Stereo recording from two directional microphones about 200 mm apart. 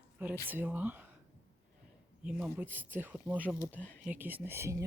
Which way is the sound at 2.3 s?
Centre (ahead or behind).